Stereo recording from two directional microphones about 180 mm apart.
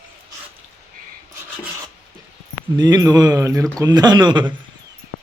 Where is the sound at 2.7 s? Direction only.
25° right (ahead or behind).